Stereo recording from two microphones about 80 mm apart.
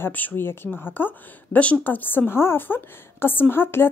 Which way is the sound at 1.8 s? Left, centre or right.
Left.